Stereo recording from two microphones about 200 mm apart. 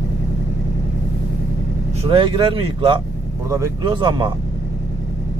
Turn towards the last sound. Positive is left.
turn(degrees=-25)  # may be behind; listen again after turning